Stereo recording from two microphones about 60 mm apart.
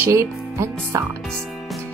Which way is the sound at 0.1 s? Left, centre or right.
Right.